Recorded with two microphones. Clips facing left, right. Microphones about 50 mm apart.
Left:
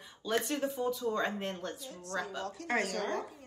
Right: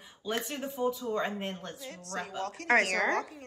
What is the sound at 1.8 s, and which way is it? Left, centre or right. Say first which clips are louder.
A woman's voice: even; right.